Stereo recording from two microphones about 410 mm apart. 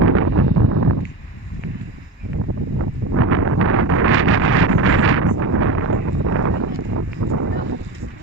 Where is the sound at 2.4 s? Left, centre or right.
Right.